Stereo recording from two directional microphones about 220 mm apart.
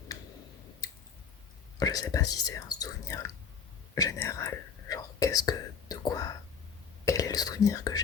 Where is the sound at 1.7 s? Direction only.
15° left (ahead or behind).